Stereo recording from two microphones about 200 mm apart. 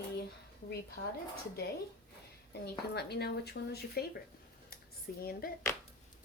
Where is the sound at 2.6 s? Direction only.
55° left (ahead or behind).